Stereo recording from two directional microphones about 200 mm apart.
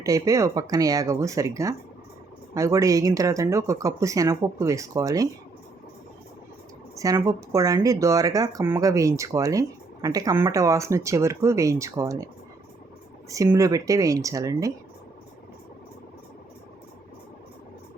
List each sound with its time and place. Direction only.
0.0 s speech: 15° right (ahead or behind)
6.9 s speech: 15° right (ahead or behind)
13.3 s speech: 15° right (ahead or behind)